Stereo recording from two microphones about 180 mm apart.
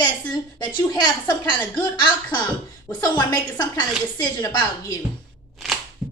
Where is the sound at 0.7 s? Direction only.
20° left (ahead or behind).